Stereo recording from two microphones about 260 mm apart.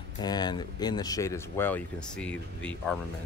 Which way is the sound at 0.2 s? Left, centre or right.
Centre.